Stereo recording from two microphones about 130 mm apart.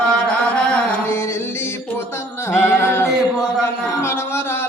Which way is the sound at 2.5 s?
20° left (ahead or behind).